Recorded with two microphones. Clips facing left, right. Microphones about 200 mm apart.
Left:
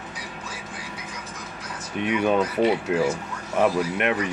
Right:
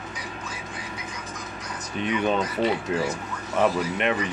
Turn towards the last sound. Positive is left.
turn(degrees=10)  # may be behind; listen again after turning